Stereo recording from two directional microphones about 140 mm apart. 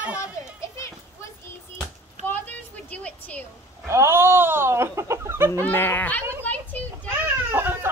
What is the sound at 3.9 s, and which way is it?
Chicken, 20° right (ahead or behind).